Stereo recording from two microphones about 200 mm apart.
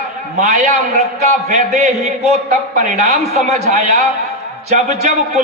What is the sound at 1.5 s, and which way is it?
Speech, 35° right (ahead or behind).